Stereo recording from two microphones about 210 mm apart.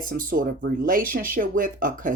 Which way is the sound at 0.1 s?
40° right (ahead or behind).